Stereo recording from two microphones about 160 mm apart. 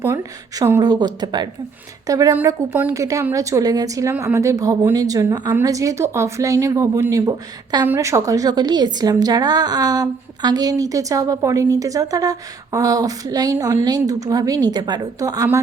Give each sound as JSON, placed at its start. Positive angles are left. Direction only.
{"t": 0.0, "sound": "a woman's voice", "side_deg": -20}